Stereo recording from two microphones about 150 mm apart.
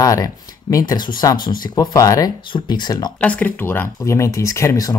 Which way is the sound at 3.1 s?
10° left (ahead or behind).